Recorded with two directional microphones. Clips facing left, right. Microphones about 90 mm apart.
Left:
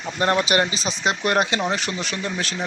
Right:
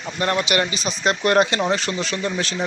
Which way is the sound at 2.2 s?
Centre (ahead or behind).